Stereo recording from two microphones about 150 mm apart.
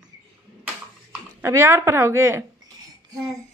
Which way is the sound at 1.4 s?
15° right (ahead or behind).